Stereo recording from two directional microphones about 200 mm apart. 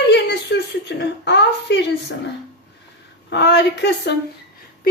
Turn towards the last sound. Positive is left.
turn(degrees=60)  # may be behind; listen again after turning